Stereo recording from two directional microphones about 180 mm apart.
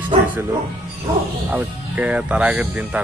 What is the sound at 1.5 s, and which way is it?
Speech, 10° right (ahead or behind).